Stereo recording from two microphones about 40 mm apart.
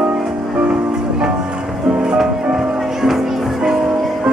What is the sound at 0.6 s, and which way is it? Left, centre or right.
Music, centre.